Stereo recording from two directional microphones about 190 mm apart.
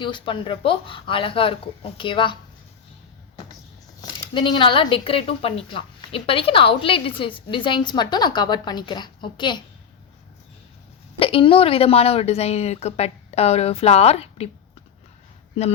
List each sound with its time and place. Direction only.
0.0 s speech: 25° left (ahead or behind)
4.0 s speech: 25° left (ahead or behind)
11.2 s a woman's voice: 30° left (ahead or behind)